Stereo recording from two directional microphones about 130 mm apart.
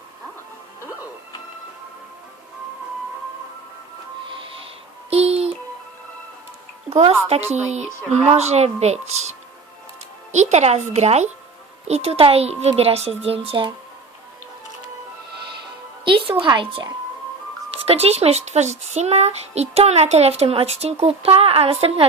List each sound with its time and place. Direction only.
5.1 s a sound: 50° right (ahead or behind)
6.9 s speech: 50° right (ahead or behind)
10.3 s a child's voice: 60° right (ahead or behind); by 13.7 s 45° right (ahead or behind)
16.0 s speech: 40° right (ahead or behind)
17.7 s a child's voice: 50° right (ahead or behind)